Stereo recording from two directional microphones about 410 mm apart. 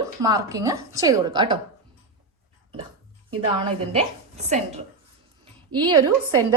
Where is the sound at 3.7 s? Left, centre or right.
Centre.